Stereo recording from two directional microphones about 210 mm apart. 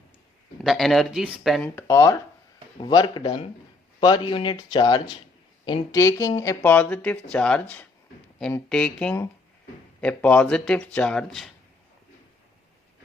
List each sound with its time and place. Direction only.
0.6 s speech: centre (ahead or behind)